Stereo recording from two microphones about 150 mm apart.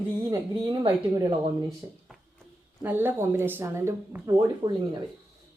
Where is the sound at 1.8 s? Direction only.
15° right (ahead or behind).